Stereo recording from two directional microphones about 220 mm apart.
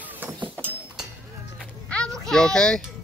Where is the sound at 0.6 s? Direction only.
10° right (ahead or behind).